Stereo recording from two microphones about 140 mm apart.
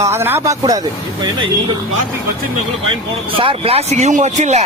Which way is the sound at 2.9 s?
40° right (ahead or behind).